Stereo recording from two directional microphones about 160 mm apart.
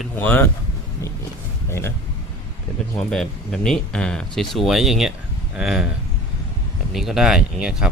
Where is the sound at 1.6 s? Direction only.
15° left (ahead or behind).